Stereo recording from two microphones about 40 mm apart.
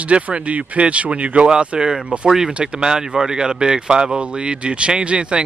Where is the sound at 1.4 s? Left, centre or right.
Right.